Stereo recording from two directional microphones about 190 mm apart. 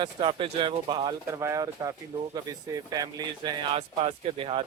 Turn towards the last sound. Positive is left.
turn(degrees=-30)  # may be behind; listen again after turning